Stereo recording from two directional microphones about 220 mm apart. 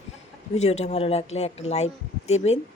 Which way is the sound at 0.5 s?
30° left (ahead or behind).